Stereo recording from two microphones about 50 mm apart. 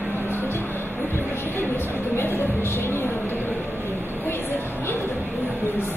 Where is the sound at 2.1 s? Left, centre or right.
Left.